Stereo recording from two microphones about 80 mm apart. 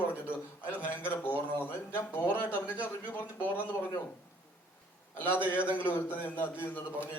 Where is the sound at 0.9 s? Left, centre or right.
Left.